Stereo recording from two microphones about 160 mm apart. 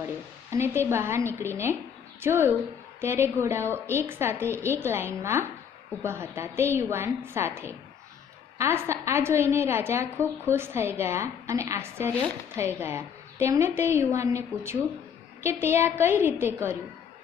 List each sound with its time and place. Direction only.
0.5 s a woman's voice: 15° right (ahead or behind)
12.1 s speech: 10° left (ahead or behind)
12.5 s a woman's voice: 15° right (ahead or behind)